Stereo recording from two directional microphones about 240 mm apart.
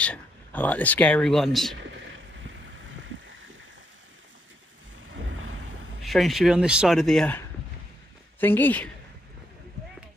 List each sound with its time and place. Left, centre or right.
0.0 s speech: centre
5.1 s a sound: right
6.0 s speech: centre